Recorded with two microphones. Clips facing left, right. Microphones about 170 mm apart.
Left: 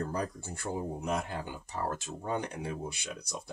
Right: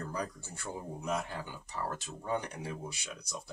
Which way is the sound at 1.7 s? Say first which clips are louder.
Left 3 dB; 45° left (ahead or behind).